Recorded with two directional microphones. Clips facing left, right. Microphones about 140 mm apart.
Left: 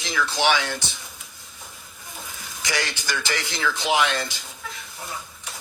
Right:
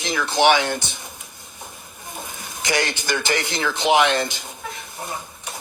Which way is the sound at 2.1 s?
50° right (ahead or behind).